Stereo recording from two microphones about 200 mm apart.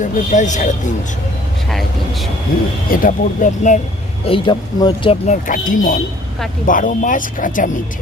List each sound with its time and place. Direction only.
0.0 s speech: 35° left (ahead or behind)
1.7 s speech: centre (ahead or behind)
2.9 s speech: 45° left (ahead or behind)
4.3 s speech: 25° left (ahead or behind); by 7.7 s 40° left (ahead or behind)